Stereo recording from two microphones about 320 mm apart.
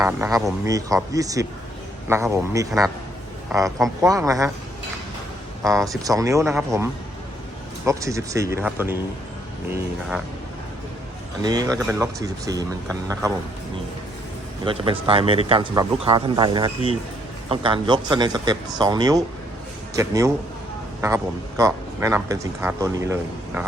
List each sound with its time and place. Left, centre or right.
0.0 s speech: centre
5.6 s speech: centre
11.4 s speech: centre
14.6 s speech: centre